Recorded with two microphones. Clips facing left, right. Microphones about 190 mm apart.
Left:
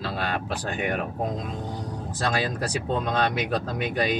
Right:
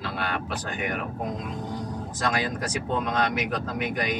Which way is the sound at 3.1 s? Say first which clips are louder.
Left 3 dB; 30° left (ahead or behind).